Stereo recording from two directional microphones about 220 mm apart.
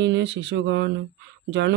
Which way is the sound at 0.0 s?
50° right (ahead or behind).